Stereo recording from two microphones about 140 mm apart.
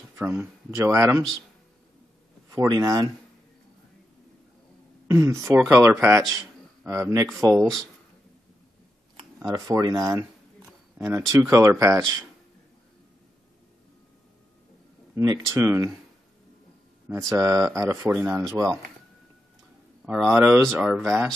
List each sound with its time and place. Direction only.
0.4 s speech: 20° right (ahead or behind)
2.5 s speech: 25° right (ahead or behind)
5.0 s speech: 20° right (ahead or behind)
9.4 s speech: 25° right (ahead or behind)
15.1 s speech: 20° right (ahead or behind)
17.1 s speech: 25° right (ahead or behind)
20.1 s speech: 10° right (ahead or behind)